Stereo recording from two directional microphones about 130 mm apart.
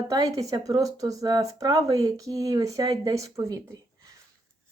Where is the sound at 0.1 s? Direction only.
25° right (ahead or behind).